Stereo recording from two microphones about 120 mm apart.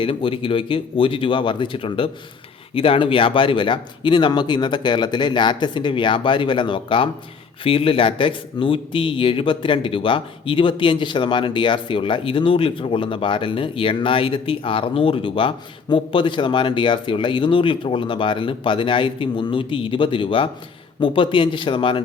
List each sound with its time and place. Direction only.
0.0 s speech: 50° left (ahead or behind)